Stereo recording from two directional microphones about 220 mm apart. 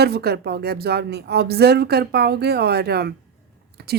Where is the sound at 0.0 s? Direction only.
45° right (ahead or behind).